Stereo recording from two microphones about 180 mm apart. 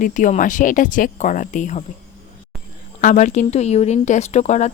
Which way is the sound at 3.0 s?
45° left (ahead or behind).